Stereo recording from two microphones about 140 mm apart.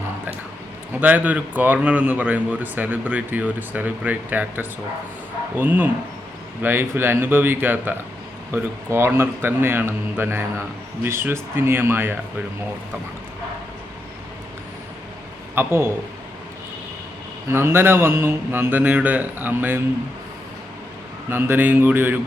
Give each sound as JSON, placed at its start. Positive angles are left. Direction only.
{"t": 0.9, "sound": "a man's voice", "side_deg": -10}
{"t": 15.5, "sound": "a man's voice", "side_deg": -15}
{"t": 17.5, "sound": "a man's voice", "side_deg": -15}
{"t": 21.2, "sound": "a man's voice", "side_deg": -15}